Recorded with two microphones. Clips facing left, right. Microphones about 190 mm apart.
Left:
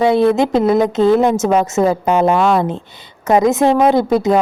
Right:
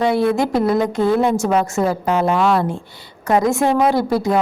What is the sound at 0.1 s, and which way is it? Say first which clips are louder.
A woman's voice: left 4 dB; 20° left (ahead or behind).